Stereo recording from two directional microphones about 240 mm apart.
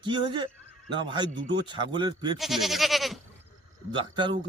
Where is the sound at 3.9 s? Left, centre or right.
Centre.